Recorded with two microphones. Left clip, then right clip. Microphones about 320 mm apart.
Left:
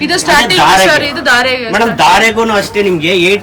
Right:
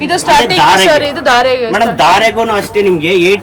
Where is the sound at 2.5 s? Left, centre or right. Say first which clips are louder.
Even; centre.